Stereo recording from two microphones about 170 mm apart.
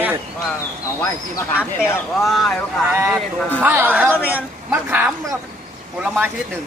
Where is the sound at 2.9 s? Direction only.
15° right (ahead or behind).